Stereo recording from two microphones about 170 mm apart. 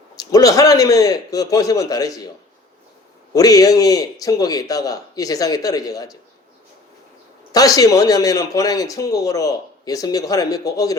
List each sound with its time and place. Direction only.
0.2 s speech: 20° left (ahead or behind)
3.3 s speech: 20° left (ahead or behind)
7.5 s speech: 20° left (ahead or behind)